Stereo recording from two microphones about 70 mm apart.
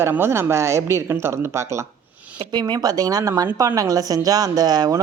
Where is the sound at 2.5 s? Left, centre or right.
Right.